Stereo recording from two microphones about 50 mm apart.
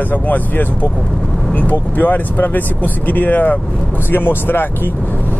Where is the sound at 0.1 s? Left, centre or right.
Left.